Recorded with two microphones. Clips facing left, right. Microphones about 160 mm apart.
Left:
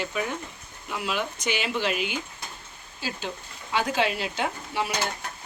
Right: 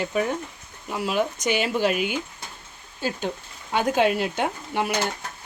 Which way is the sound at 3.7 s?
50° right (ahead or behind).